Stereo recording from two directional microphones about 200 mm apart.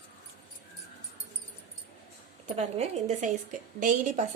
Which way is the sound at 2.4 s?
35° right (ahead or behind).